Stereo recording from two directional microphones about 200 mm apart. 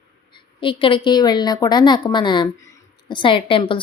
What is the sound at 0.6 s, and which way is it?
A woman's voice, 25° left (ahead or behind).